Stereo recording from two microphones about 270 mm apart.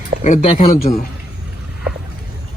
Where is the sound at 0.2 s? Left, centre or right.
Left.